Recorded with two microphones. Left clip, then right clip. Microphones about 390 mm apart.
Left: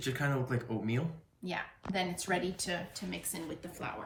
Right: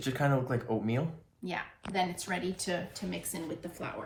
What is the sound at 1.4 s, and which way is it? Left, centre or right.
Speech, centre.